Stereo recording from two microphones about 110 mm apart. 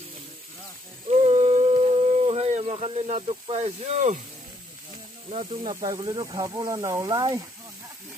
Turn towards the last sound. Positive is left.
turn(degrees=-30)  # may be behind; listen again after turning